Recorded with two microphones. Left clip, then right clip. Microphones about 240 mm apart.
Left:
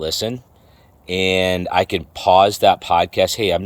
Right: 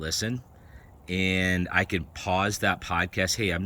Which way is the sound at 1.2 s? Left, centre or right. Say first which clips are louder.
Left 9 dB; right.